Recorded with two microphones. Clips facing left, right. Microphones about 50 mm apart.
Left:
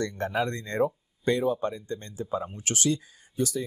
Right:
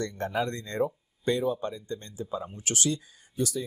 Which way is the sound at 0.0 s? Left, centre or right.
Left.